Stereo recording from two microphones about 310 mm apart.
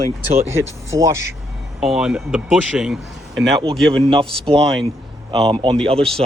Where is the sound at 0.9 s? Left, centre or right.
Centre.